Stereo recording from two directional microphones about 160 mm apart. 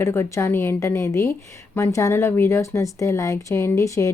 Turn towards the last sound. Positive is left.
turn(degrees=20)  # may be behind; listen again after turning